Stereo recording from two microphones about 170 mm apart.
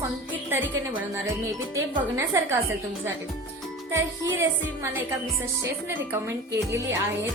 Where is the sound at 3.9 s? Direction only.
15° right (ahead or behind).